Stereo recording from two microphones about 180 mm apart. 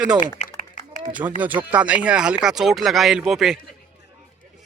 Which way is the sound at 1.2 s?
20° right (ahead or behind).